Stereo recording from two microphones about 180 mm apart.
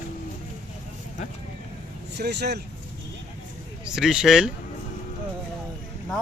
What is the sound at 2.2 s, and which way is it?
Speech, 65° right (ahead or behind).